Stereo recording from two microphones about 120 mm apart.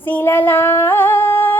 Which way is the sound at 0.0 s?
15° left (ahead or behind).